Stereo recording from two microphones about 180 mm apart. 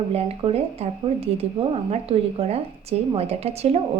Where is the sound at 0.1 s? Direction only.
35° right (ahead or behind).